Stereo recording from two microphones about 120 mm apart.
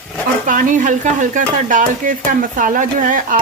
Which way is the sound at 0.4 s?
90° right.